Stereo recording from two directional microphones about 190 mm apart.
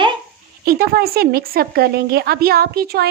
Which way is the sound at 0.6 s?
55° right (ahead or behind).